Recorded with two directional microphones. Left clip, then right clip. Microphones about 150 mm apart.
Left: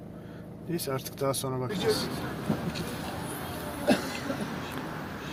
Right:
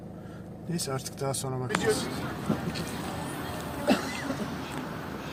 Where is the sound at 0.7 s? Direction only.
10° left (ahead or behind).